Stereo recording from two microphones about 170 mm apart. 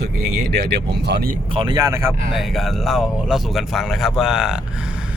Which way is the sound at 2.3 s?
Centre (ahead or behind).